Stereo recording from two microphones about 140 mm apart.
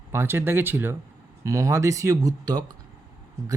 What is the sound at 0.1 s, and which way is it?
Speech, 15° right (ahead or behind).